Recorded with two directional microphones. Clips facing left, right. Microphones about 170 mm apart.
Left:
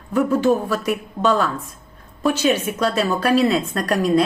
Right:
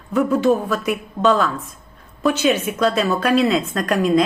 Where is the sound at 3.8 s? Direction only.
35° left (ahead or behind).